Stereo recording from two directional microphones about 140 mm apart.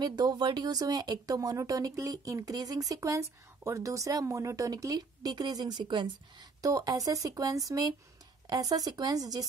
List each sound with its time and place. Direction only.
0.0 s speech: 30° right (ahead or behind)